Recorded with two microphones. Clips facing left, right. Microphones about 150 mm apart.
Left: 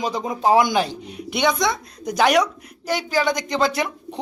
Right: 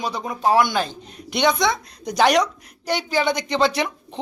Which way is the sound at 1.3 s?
Centre (ahead or behind).